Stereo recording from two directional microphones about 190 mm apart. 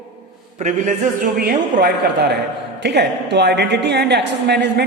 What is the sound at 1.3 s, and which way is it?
A man's voice, 55° right (ahead or behind).